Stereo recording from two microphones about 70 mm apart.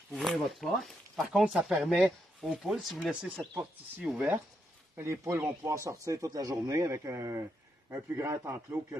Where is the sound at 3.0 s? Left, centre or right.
Centre.